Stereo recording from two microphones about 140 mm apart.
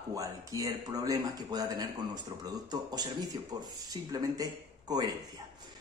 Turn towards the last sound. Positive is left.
turn(degrees=-30)  # may be behind; listen again after turning